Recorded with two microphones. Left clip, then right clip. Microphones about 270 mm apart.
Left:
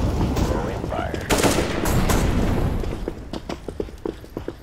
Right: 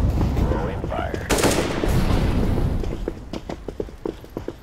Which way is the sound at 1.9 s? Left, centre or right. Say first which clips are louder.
Left 2 dB; centre.